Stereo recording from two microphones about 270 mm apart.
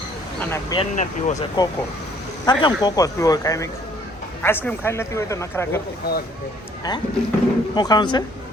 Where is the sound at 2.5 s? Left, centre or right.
Centre.